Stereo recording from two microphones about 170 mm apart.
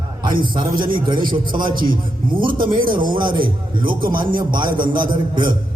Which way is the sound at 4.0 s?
55° right (ahead or behind).